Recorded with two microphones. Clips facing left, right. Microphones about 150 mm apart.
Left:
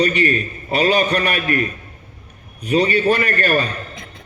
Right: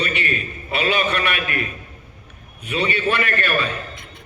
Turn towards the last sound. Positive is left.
turn(degrees=40)  # may be behind; listen again after turning